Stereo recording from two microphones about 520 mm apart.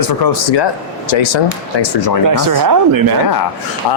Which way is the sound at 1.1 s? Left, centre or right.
Left.